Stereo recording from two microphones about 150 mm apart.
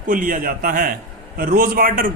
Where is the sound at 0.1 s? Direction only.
65° right (ahead or behind).